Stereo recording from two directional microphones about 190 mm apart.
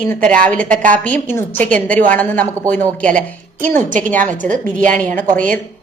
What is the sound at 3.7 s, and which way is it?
A woman's voice, 45° right (ahead or behind).